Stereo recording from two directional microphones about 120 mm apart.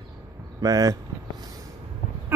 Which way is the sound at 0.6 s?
30° right (ahead or behind).